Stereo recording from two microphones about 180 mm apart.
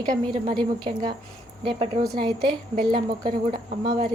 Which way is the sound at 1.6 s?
25° right (ahead or behind).